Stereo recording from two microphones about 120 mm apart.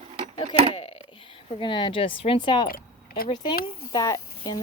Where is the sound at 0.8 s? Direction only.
50° left (ahead or behind).